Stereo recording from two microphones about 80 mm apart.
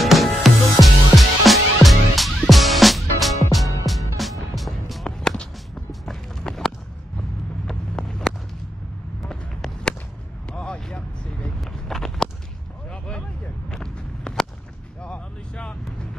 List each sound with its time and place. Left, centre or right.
0.0 s music: centre
5.0 s a sound: centre
7.6 s vehicle: centre
9.3 s a sound: centre
12.9 s vehicle: centre
13.7 s walk: centre
15.0 s vehicle: centre